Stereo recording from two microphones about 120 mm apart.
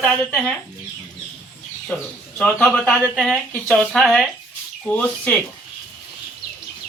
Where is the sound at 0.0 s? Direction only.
10° left (ahead or behind).